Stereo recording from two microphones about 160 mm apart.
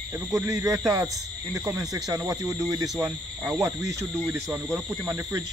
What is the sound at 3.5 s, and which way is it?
Speech, 20° right (ahead or behind).